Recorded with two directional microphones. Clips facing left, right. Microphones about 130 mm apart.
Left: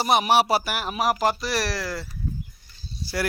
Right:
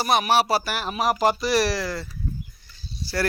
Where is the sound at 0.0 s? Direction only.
20° left (ahead or behind); by 2.0 s centre (ahead or behind).